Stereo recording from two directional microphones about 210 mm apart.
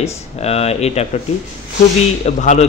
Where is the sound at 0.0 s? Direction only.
30° left (ahead or behind).